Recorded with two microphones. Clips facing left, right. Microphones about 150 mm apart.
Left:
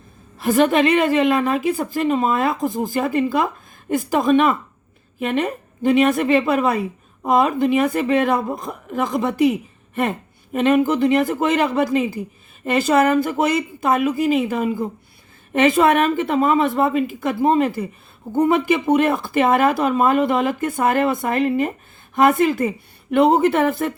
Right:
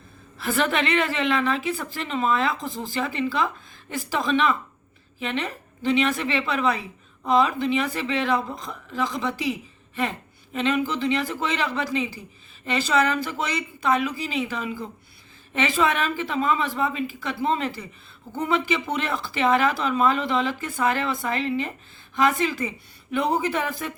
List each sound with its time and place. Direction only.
0.3 s a woman's voice: 40° left (ahead or behind); by 23.9 s 60° left (ahead or behind)